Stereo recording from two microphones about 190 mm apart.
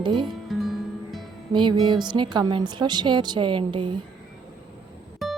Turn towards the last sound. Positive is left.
turn(degrees=0)  # may be behind; listen again after turning